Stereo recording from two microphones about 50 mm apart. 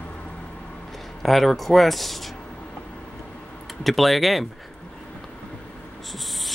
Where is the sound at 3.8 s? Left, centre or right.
Centre.